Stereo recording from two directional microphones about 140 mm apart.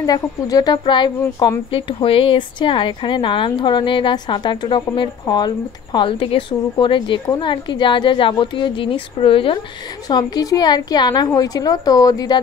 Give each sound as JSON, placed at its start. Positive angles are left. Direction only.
{"t": 0.0, "sound": "a woman's voice", "side_deg": 25}
{"t": 10.0, "sound": "a woman's voice", "side_deg": 25}